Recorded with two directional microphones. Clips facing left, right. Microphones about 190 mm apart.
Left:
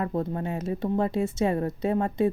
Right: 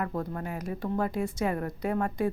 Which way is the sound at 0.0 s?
25° left (ahead or behind).